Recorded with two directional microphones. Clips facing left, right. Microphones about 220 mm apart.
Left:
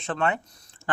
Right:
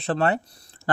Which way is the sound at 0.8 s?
40° right (ahead or behind).